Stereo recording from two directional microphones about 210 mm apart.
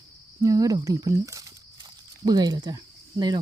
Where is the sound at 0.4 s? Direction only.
15° right (ahead or behind).